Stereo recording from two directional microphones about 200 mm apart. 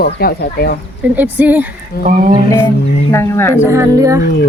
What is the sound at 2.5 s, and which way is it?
Speech, 15° left (ahead or behind).